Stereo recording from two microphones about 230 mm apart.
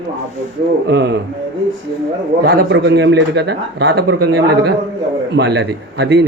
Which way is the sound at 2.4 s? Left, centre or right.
Right.